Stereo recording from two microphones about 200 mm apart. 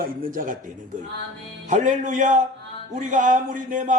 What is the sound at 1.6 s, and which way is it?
A man's voice, 40° right (ahead or behind).